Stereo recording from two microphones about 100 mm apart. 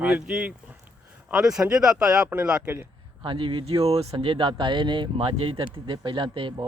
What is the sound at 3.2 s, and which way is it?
Speech, 55° right (ahead or behind).